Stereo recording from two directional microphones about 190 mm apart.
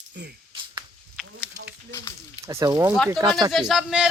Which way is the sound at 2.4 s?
20° right (ahead or behind).